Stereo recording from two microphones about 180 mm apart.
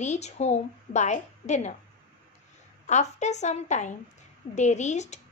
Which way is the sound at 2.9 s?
40° left (ahead or behind).